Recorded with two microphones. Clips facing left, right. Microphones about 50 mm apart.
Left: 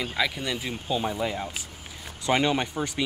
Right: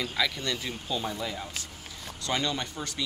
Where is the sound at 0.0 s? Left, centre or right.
Centre.